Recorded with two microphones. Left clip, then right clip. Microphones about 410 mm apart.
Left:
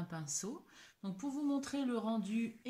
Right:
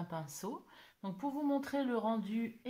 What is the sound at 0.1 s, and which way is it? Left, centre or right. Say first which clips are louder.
Speech: even; centre.